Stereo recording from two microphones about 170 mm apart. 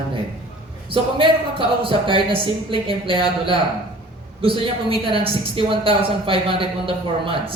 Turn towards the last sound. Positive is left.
turn(degrees=-30)  # may be behind; listen again after turning